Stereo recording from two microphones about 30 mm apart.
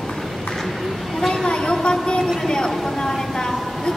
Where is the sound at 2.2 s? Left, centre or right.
Centre.